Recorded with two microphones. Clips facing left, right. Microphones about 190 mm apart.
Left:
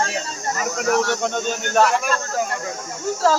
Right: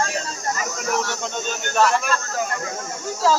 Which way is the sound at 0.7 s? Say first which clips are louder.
Left 5 dB; 60° left (ahead or behind).